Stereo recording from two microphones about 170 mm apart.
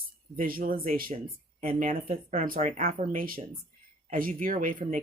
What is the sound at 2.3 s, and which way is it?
Speech, 50° right (ahead or behind).